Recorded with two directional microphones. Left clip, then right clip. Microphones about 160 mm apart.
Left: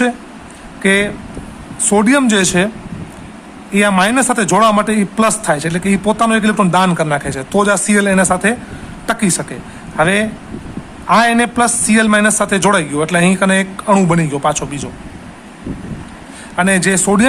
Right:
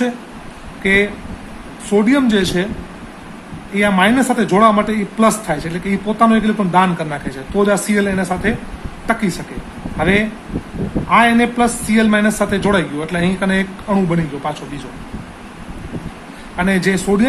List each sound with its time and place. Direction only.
0.8 s speech: 40° left (ahead or behind)
3.8 s a man's voice: 40° left (ahead or behind)
10.0 s a man's voice: 40° left (ahead or behind)
16.6 s a man's voice: 35° left (ahead or behind)